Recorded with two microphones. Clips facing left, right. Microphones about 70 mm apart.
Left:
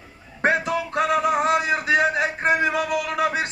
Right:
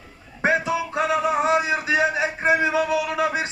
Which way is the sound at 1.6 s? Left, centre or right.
Left.